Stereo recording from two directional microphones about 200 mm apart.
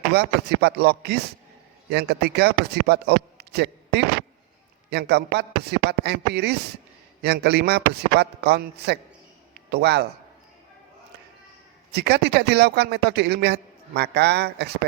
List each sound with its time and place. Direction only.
0.1 s a man's voice: 55° right (ahead or behind)
11.9 s a man's voice: 55° right (ahead or behind)